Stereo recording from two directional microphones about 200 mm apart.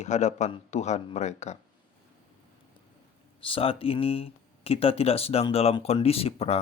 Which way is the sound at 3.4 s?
25° left (ahead or behind).